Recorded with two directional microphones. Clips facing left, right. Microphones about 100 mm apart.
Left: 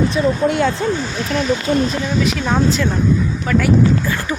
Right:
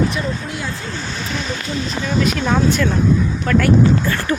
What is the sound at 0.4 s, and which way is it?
Speech, 60° left (ahead or behind).